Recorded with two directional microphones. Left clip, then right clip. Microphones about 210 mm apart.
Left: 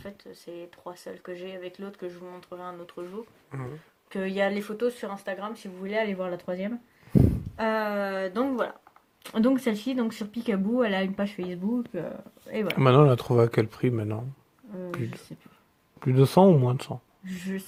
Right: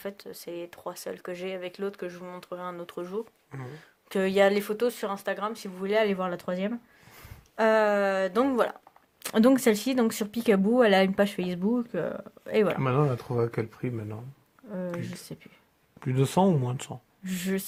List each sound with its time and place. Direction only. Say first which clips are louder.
0.0 s speech: right 5 dB; 45° right (ahead or behind)
12.6 s speech: left 6 dB; 30° left (ahead or behind); by 17.0 s 15° left (ahead or behind)
17.2 s speech: right 5 dB; 45° right (ahead or behind)